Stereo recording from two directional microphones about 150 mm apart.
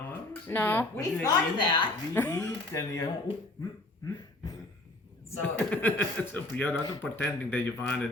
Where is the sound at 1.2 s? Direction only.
30° left (ahead or behind).